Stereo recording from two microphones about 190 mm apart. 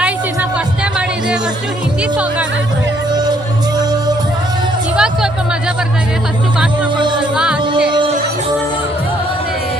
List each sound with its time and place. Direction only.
4.9 s music: 5° right (ahead or behind)
7.2 s music: 5° right (ahead or behind)
7.9 s music: 25° right (ahead or behind)